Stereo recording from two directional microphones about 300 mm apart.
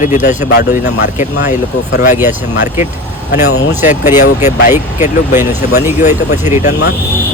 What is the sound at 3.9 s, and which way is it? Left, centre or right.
Speech, left.